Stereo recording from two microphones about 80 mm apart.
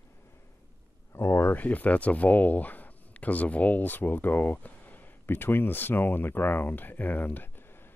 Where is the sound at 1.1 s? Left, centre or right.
Left.